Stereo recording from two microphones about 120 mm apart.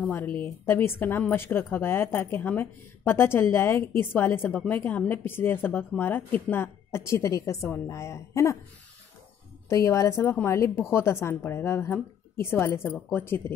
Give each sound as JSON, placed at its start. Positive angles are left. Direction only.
{"t": 0.0, "sound": "a woman's voice", "side_deg": 15}
{"t": 9.7, "sound": "a woman's voice", "side_deg": 25}